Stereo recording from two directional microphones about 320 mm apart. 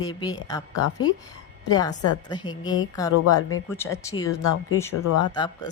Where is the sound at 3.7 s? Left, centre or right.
Centre.